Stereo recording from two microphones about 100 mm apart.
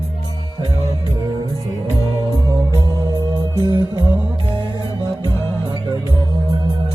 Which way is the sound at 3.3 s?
40° right (ahead or behind).